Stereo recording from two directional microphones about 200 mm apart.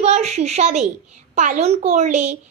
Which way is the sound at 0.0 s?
35° right (ahead or behind).